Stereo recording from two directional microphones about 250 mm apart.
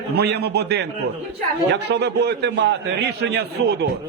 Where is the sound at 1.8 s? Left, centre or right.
Right.